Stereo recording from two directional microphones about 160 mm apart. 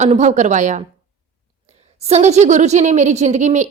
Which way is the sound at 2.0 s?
45° right (ahead or behind).